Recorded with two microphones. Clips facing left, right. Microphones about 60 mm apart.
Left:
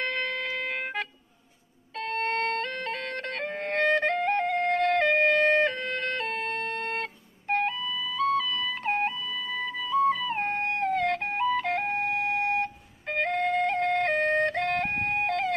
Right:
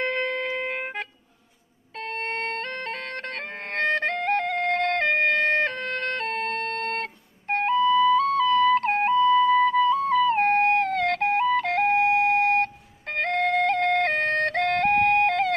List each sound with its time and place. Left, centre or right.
0.0 s music: right
2.0 s music: right